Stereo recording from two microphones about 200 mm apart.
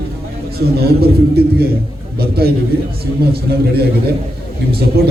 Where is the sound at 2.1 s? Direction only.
50° right (ahead or behind).